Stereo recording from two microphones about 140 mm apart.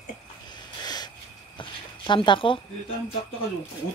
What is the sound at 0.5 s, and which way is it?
Snort, 30° left (ahead or behind).